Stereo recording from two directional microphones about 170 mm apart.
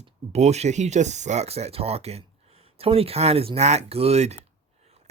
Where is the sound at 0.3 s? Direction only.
40° right (ahead or behind).